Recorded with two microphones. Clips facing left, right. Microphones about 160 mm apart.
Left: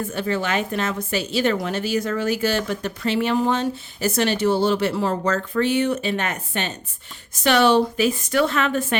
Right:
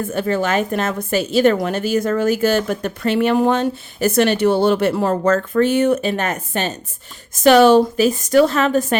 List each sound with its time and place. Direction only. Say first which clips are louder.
0.1 s a woman's voice: right 7 dB; 45° right (ahead or behind)